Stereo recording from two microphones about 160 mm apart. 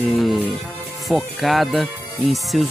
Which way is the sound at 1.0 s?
Centre (ahead or behind).